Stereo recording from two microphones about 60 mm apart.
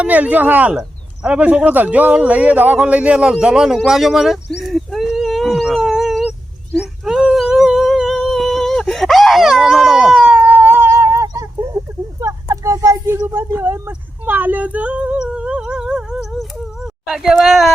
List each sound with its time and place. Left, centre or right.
0.0 s a man's voice: right
3.8 s speech: centre
5.7 s a sound: centre
7.0 s dog: centre
7.3 s humming: centre
8.2 s whimper: centre
10.2 s a sound: right
13.2 s speech: right; by 17.7 s centre